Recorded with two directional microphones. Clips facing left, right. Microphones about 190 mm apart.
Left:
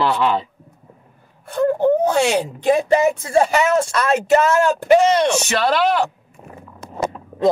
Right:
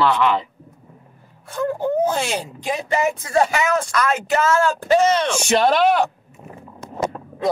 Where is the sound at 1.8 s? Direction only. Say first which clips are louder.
Left 4 dB; 70° left (ahead or behind).